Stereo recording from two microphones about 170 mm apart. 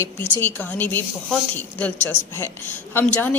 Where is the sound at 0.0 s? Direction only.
10° left (ahead or behind).